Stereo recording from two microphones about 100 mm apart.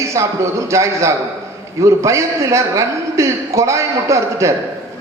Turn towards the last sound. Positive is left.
turn(degrees=-30)  # may be behind; listen again after turning